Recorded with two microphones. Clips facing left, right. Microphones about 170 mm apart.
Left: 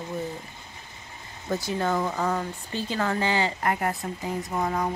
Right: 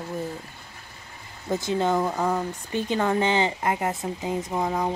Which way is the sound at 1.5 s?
20° right (ahead or behind).